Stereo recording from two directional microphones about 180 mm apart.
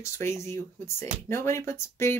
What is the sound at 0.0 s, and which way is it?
Speech, 15° left (ahead or behind).